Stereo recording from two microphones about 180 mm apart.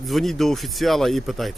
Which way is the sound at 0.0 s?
Centre (ahead or behind).